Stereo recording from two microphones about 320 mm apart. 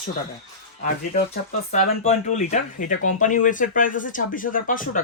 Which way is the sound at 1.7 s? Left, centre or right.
Left.